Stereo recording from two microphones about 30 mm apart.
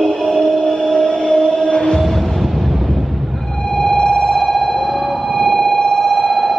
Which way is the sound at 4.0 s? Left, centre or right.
Left.